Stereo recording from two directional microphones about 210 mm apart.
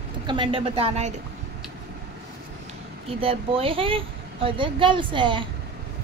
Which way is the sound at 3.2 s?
25° right (ahead or behind).